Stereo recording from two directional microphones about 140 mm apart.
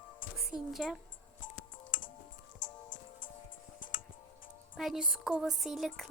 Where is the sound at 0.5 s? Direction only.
5° right (ahead or behind).